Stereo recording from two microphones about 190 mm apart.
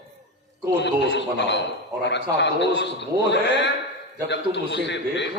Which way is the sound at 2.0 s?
65° left (ahead or behind).